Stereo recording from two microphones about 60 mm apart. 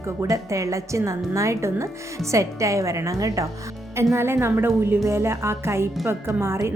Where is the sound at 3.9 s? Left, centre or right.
Right.